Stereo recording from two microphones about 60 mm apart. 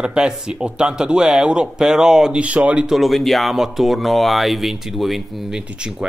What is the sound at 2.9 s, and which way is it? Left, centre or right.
Speech, centre.